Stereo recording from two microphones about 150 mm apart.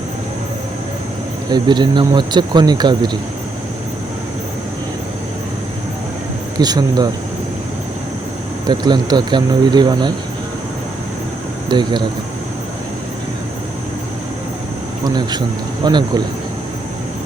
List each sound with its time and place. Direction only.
1.5 s speech: 30° right (ahead or behind)
6.6 s speech: 25° right (ahead or behind)
8.6 s speech: 30° right (ahead or behind)
11.7 s speech: 30° right (ahead or behind)
15.0 s speech: 30° right (ahead or behind)